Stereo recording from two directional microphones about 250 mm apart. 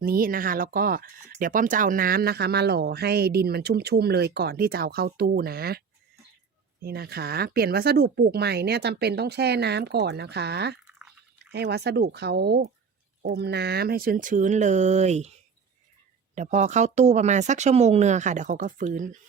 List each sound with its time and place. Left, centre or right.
0.0 s speech: right
6.8 s speech: right
10.8 s a sound: centre
11.5 s speech: right
16.3 s speech: right